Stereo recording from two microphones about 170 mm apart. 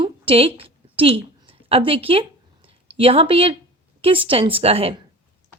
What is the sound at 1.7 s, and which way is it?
A woman's voice, 35° right (ahead or behind).